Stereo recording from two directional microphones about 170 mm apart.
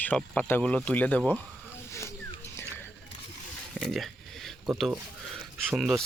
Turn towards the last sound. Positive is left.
turn(degrees=0)  # may be behind; listen again after turning